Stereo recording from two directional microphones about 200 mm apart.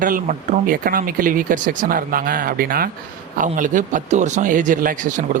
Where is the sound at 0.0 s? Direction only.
40° right (ahead or behind).